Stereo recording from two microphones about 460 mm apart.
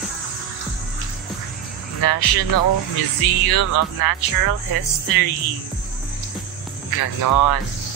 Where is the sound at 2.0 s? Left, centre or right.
Left.